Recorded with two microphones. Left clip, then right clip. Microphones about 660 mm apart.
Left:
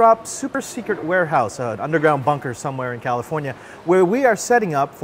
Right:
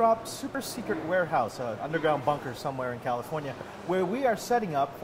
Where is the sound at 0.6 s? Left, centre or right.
Left.